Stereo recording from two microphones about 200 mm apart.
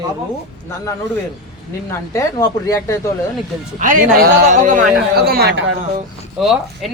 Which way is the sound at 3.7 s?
40° right (ahead or behind).